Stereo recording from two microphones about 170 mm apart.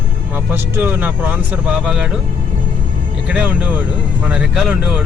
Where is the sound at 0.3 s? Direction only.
10° right (ahead or behind).